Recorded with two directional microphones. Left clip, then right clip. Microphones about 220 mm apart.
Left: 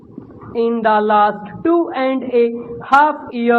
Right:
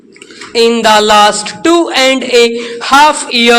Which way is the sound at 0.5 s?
35° right (ahead or behind).